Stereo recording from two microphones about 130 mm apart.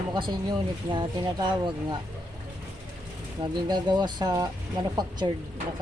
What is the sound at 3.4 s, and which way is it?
Speech, 35° right (ahead or behind).